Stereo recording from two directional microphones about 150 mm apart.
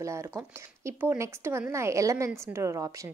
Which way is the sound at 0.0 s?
20° right (ahead or behind).